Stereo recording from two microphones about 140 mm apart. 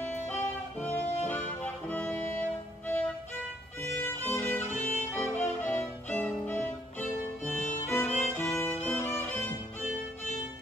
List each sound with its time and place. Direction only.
0.3 s music: 10° left (ahead or behind)
3.8 s violin: 15° left (ahead or behind)
5.1 s music: 10° left (ahead or behind)
7.9 s violin: 10° left (ahead or behind)
9.8 s violin: 55° left (ahead or behind)